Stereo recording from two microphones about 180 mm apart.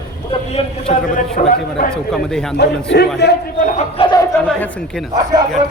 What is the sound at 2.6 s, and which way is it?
Speech, 65° left (ahead or behind).